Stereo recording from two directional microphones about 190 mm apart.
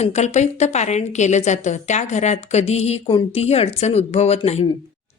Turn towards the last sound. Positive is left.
turn(degrees=35)  # may be behind; listen again after turning